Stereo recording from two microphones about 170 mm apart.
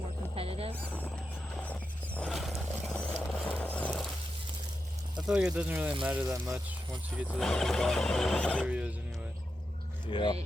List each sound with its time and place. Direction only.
0.3 s music: 35° right (ahead or behind)
0.9 s a sound: 10° left (ahead or behind)
5.1 s speech: 5° right (ahead or behind)
8.6 s speech: 5° right (ahead or behind)
10.1 s speech: 30° left (ahead or behind)